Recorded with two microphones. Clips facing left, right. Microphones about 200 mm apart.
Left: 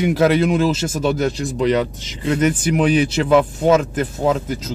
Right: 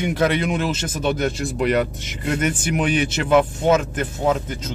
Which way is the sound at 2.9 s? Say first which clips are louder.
Even; 35° left (ahead or behind).